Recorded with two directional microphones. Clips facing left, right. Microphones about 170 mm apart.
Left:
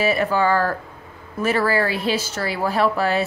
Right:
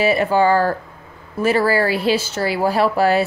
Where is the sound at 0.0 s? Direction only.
30° right (ahead or behind).